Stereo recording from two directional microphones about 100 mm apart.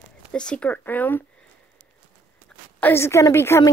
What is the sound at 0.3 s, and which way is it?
Speech, 10° left (ahead or behind).